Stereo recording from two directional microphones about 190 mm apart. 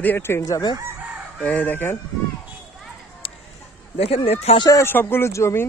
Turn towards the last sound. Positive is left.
turn(degrees=15)  # may be behind; listen again after turning